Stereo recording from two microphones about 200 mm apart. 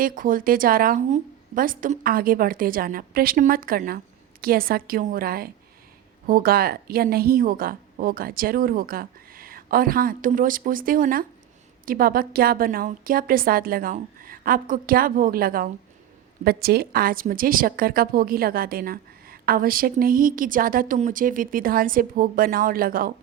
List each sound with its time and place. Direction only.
0.0 s a woman's voice: 45° right (ahead or behind)